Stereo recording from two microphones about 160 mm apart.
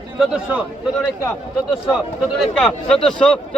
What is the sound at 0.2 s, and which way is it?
Speech, 5° right (ahead or behind).